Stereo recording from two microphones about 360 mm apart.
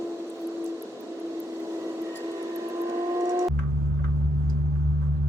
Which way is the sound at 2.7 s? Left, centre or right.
Centre.